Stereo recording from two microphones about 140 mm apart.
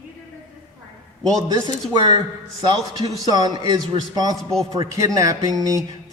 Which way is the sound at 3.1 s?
30° right (ahead or behind).